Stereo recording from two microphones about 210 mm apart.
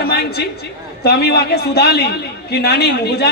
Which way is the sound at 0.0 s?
50° left (ahead or behind).